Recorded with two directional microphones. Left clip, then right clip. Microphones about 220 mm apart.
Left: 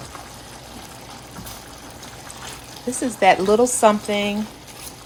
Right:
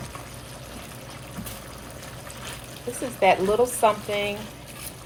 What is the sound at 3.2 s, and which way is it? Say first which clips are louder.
Speech: left 4 dB; 45° left (ahead or behind).